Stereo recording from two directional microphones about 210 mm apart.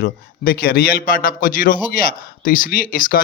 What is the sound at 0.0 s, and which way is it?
A man's voice, 45° left (ahead or behind).